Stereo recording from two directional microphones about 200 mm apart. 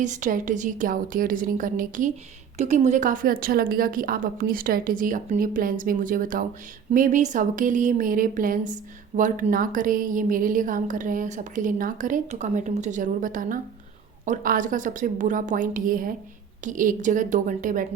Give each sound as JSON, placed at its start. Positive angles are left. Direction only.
{"t": 0.0, "sound": "a woman's voice", "side_deg": -40}